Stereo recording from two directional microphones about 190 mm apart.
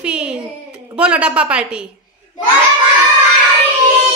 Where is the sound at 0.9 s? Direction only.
5° right (ahead or behind).